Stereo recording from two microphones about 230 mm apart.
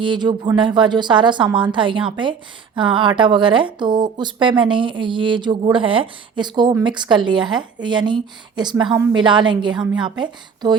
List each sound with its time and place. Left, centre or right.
0.0 s speech: centre